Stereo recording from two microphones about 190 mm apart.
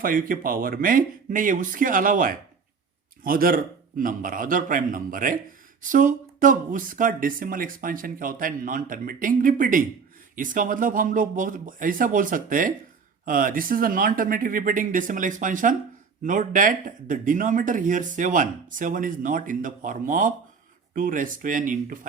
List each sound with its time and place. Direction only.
0.0 s speech: 50° right (ahead or behind)